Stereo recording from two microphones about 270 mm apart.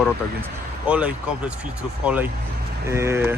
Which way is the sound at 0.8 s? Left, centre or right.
Centre.